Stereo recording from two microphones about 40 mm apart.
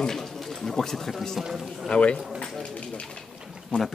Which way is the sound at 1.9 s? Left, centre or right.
Left.